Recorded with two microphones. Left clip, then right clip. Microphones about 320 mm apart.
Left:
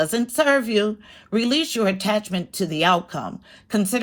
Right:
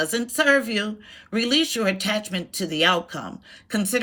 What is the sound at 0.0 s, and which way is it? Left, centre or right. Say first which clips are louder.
Speech: left 2 dB; centre.